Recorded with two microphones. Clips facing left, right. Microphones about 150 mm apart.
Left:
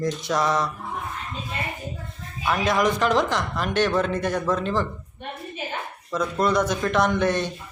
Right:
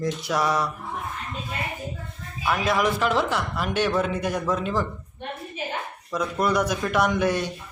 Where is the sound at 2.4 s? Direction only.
5° right (ahead or behind).